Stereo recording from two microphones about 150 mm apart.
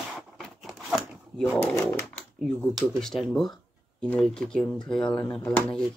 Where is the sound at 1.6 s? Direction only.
5° left (ahead or behind).